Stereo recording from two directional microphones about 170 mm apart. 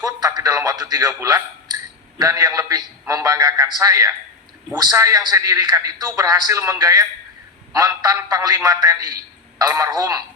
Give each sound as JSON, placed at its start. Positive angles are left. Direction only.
{"t": 0.0, "sound": "a man's voice", "side_deg": -20}